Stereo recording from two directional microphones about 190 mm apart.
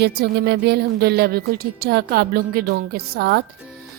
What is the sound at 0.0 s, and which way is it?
Speech, 60° right (ahead or behind).